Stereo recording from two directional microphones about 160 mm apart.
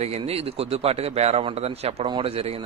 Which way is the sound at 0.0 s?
40° right (ahead or behind).